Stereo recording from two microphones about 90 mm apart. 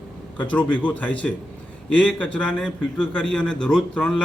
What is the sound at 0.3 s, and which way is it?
A man's voice, 15° left (ahead or behind).